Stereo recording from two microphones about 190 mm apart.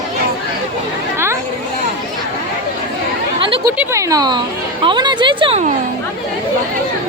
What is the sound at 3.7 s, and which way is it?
Speech, 15° right (ahead or behind).